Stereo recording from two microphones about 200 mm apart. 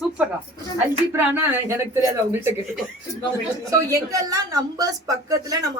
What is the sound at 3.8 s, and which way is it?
Speech, 15° right (ahead or behind).